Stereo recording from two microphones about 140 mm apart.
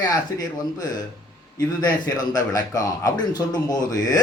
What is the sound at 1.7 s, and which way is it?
A man's voice, 30° left (ahead or behind).